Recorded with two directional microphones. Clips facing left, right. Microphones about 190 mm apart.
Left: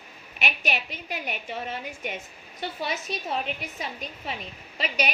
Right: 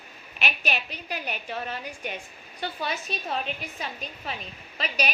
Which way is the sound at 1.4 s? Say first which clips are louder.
Even; 20° left (ahead or behind).